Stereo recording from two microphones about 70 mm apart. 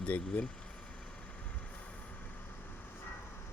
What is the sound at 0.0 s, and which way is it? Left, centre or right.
Speech, centre.